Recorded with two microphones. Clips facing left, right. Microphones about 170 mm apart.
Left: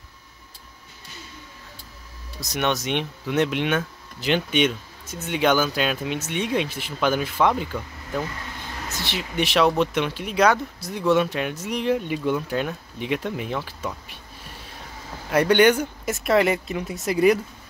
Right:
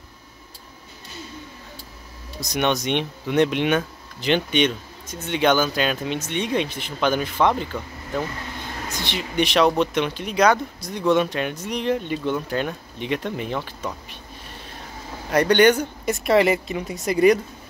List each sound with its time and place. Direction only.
2.5 s speech: centre (ahead or behind)
15.3 s speech: 5° left (ahead or behind)